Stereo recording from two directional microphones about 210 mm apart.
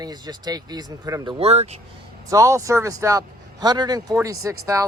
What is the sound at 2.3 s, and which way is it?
Speech, 15° right (ahead or behind).